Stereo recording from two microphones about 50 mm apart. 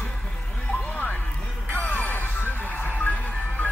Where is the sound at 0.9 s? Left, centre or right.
Left.